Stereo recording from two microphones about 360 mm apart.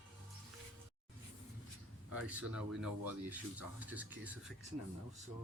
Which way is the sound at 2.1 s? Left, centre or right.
Centre.